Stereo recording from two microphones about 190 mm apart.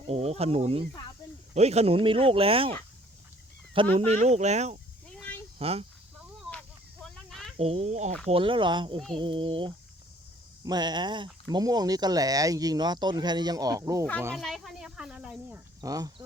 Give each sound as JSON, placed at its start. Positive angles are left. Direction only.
{"t": 0.1, "sound": "speech", "side_deg": -35}
{"t": 3.8, "sound": "speech", "side_deg": -25}
{"t": 4.2, "sound": "speech", "side_deg": -35}
{"t": 5.1, "sound": "a sound", "side_deg": 10}
{"t": 5.5, "sound": "speech", "side_deg": -30}
{"t": 6.5, "sound": "a sound", "side_deg": 5}
{"t": 7.5, "sound": "speech", "side_deg": -30}
{"t": 14.3, "sound": "speech", "side_deg": 0}